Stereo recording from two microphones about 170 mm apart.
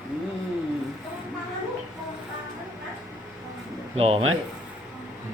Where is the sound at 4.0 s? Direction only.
35° right (ahead or behind).